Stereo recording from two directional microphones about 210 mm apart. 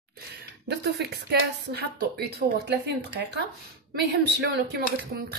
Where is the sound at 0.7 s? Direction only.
50° right (ahead or behind).